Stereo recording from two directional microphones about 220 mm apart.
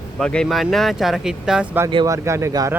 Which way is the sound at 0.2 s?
5° left (ahead or behind).